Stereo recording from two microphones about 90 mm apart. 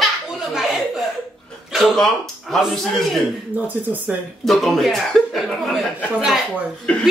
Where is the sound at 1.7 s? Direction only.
Centre (ahead or behind).